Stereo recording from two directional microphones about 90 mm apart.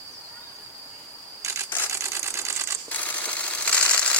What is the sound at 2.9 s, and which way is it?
Camera, 20° left (ahead or behind).